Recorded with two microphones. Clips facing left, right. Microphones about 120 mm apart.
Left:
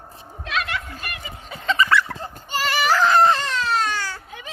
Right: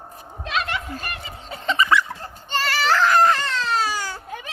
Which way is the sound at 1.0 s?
30° right (ahead or behind).